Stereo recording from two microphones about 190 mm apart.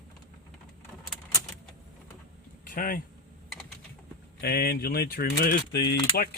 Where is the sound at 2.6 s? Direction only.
45° left (ahead or behind).